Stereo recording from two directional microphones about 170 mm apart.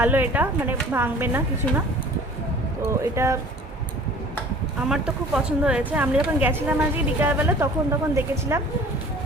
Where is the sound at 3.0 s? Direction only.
15° right (ahead or behind).